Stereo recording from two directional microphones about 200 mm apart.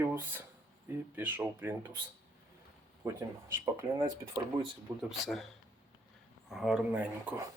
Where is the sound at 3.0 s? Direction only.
15° right (ahead or behind).